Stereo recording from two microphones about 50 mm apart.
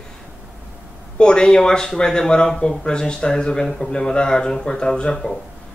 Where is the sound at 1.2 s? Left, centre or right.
Centre.